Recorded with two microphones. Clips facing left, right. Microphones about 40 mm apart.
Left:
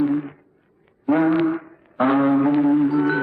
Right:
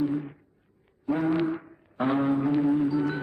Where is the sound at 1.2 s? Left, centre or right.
Left.